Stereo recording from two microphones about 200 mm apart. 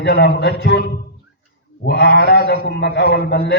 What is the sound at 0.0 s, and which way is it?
A man's voice, 55° left (ahead or behind).